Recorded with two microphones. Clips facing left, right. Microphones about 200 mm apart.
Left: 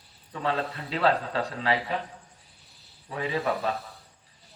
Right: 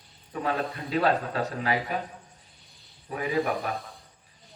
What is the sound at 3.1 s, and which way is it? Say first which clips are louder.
Speech: right 1 dB; 30° left (ahead or behind).